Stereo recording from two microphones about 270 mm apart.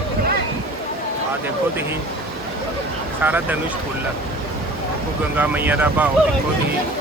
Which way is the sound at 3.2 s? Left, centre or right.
Centre.